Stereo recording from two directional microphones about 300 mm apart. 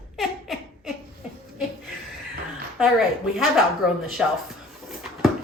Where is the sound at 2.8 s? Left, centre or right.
Centre.